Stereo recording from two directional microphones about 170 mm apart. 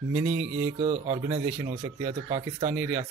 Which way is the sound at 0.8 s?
40° right (ahead or behind).